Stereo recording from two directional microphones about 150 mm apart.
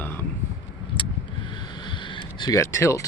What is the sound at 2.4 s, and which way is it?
Speech, 20° left (ahead or behind).